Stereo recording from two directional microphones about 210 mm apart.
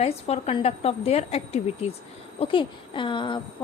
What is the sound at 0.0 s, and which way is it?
A woman's voice, 30° left (ahead or behind).